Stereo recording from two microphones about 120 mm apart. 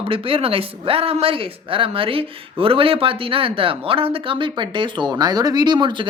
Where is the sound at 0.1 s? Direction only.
50° right (ahead or behind).